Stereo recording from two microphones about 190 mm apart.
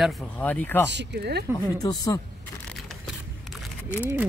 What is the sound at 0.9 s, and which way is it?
Speech, 65° right (ahead or behind).